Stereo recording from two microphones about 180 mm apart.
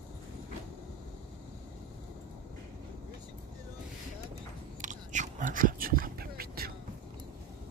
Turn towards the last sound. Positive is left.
turn(degrees=-55)  # may be behind; listen again after turning